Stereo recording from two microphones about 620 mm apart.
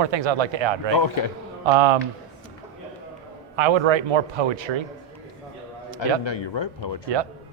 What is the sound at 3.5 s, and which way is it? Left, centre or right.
Speech, right.